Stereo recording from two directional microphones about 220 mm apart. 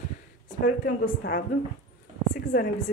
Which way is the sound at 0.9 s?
40° left (ahead or behind).